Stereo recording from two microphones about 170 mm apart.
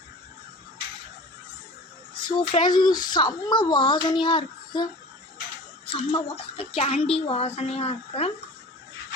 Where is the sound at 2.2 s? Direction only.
25° left (ahead or behind).